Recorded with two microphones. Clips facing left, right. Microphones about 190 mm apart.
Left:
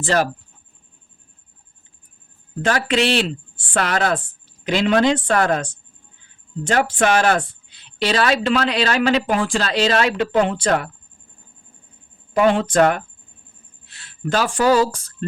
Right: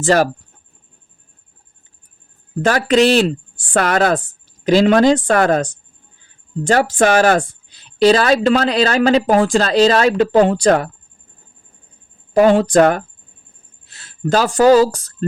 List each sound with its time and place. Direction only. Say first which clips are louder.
0.0 s speech: right 5 dB; 45° right (ahead or behind)
2.6 s speech: right 6 dB; 40° right (ahead or behind)
6.7 s speech: right 4 dB; 40° right (ahead or behind)
12.3 s speech: right 5 dB; 40° right (ahead or behind)